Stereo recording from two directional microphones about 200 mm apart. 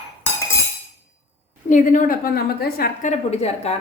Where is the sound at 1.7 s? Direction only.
40° left (ahead or behind).